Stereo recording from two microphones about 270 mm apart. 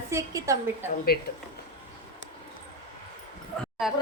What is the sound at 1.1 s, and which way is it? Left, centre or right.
Speech, left.